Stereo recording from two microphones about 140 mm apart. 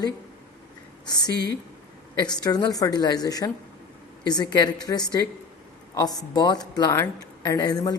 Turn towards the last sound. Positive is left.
turn(degrees=30)  # may be behind; listen again after turning